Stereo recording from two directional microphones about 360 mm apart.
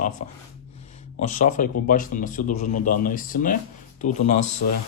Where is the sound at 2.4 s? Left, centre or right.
Left.